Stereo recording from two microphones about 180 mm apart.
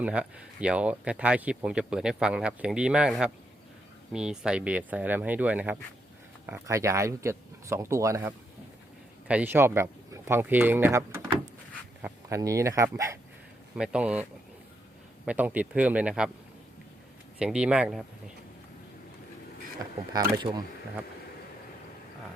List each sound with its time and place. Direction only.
0.0 s speech: 5° right (ahead or behind)
13.7 s speech: 5° right (ahead or behind)
15.3 s speech: 10° right (ahead or behind)
17.4 s speech: 5° right (ahead or behind)
20.1 s speech: 25° right (ahead or behind)